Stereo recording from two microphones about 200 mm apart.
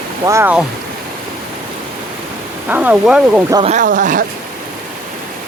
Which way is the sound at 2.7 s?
10° right (ahead or behind).